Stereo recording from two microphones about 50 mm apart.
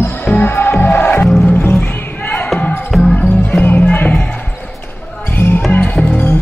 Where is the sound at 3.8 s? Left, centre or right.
Left.